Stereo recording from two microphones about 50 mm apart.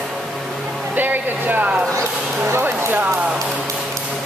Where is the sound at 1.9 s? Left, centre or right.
Right.